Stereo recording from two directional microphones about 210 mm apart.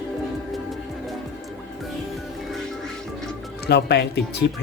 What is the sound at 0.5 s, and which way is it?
Music, centre (ahead or behind).